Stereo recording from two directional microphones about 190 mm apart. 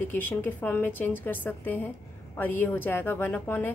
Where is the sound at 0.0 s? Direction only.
10° left (ahead or behind).